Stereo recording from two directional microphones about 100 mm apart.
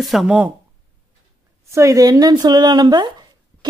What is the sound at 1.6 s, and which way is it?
Speech, 30° right (ahead or behind).